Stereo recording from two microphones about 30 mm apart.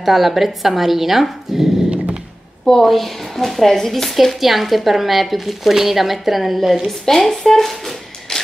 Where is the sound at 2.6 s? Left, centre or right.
Centre.